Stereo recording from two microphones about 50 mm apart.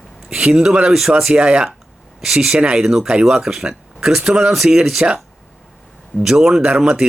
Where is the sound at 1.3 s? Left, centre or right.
Centre.